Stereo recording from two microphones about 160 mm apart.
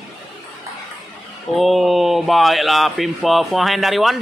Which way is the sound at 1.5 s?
Centre (ahead or behind).